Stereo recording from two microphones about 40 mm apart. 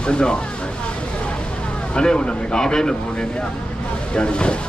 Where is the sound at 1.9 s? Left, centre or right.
Left.